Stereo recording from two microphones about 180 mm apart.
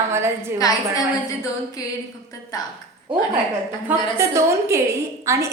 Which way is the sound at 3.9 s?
15° right (ahead or behind).